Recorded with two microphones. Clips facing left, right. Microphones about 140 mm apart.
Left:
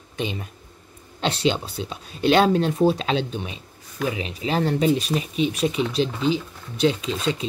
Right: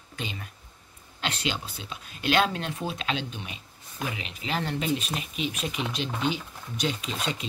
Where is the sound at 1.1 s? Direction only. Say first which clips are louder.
Left 9 dB; 30° left (ahead or behind).